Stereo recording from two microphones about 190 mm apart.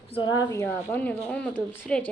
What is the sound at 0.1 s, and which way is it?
Speech, 25° left (ahead or behind).